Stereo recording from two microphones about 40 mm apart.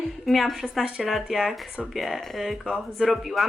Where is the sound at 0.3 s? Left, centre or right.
Centre.